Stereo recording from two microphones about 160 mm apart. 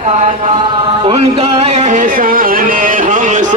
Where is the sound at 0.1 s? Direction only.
45° right (ahead or behind).